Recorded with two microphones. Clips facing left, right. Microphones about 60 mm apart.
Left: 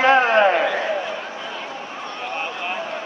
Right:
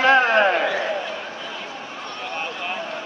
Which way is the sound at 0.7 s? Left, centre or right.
Centre.